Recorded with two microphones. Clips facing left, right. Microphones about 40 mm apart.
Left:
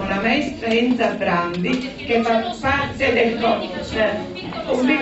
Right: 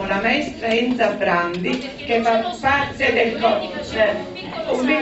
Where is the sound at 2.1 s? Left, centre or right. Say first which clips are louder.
Right 1 dB; centre.